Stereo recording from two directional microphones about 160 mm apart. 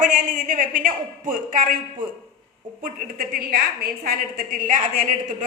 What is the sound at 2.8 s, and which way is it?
A woman's voice, 70° right (ahead or behind).